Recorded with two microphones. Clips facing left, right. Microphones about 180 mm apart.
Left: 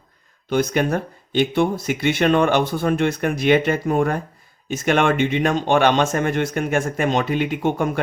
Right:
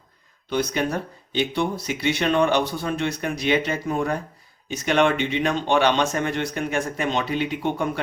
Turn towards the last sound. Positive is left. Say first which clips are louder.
# left 4 dB
turn(degrees=50)  # may be behind; listen again after turning